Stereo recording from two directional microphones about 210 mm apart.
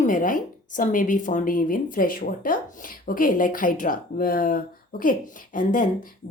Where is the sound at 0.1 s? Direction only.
40° left (ahead or behind).